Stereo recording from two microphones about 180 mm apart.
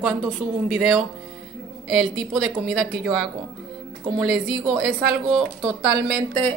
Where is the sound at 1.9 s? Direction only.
Centre (ahead or behind).